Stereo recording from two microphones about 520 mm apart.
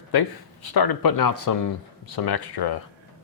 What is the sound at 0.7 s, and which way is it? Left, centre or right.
Speech, left.